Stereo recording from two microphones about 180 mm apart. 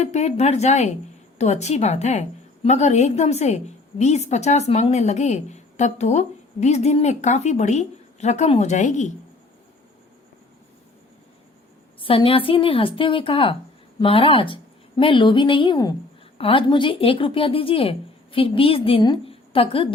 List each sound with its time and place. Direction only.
0.0 s a woman's voice: 40° left (ahead or behind)
11.9 s speech: 30° left (ahead or behind)